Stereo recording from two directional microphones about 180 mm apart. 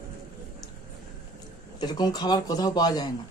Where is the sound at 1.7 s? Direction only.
25° left (ahead or behind).